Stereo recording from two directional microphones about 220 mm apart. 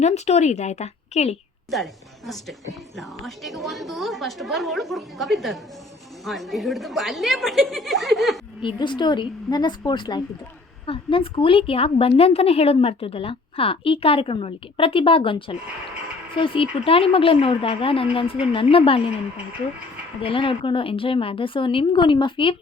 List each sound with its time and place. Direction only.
0.0 s a woman's voice: 30° left (ahead or behind)
1.7 s a woman's voice: centre (ahead or behind)
8.6 s a woman's voice: 20° left (ahead or behind)
20.2 s a woman's voice: 25° left (ahead or behind)